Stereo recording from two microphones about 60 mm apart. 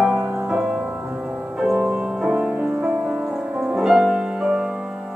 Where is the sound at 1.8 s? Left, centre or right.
Centre.